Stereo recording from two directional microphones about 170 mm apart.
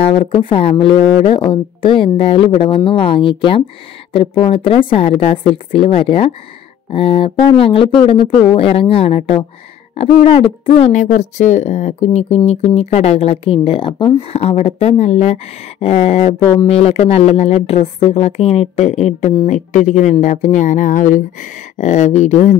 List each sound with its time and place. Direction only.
0.0 s speech: 30° left (ahead or behind)